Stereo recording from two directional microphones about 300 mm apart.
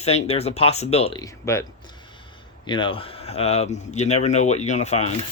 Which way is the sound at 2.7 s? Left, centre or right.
Centre.